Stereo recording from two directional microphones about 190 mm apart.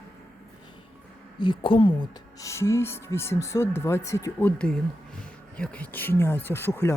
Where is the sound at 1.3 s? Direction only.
25° left (ahead or behind).